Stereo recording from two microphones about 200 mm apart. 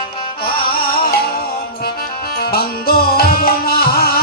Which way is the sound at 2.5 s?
50° left (ahead or behind).